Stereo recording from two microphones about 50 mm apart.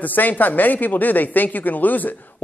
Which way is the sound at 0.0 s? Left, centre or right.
Left.